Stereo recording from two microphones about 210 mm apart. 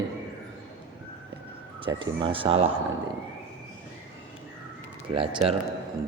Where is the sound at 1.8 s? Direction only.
25° right (ahead or behind).